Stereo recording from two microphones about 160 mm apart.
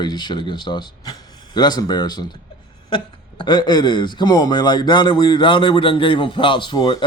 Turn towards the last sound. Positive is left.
turn(degrees=25)  # may be behind; listen again after turning